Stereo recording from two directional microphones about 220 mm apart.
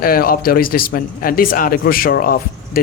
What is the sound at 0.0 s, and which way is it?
Speech, 40° left (ahead or behind).